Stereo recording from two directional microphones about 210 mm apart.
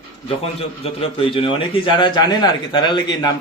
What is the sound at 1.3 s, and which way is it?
A man's voice, 25° left (ahead or behind).